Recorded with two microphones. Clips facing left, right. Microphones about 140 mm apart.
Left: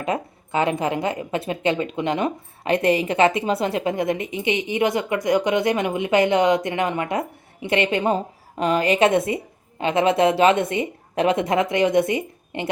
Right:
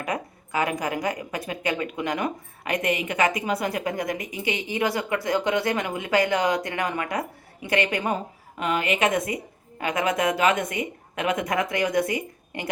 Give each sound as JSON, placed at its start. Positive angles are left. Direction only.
{"t": 0.0, "sound": "speech", "side_deg": 25}